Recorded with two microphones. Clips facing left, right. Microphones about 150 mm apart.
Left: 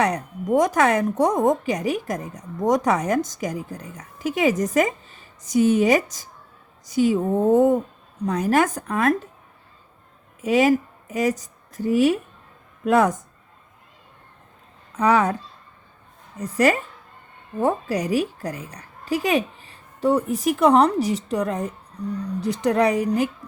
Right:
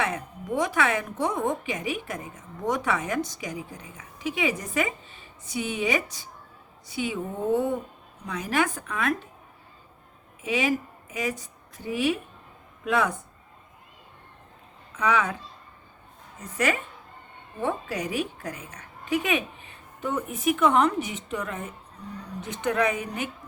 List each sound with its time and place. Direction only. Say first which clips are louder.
0.0 s a woman's voice: left 7 dB; 40° left (ahead or behind)
10.4 s a woman's voice: left 8 dB; 40° left (ahead or behind)
14.9 s a woman's voice: left 6 dB; 40° left (ahead or behind)
16.4 s a woman's voice: left 7 dB; 40° left (ahead or behind)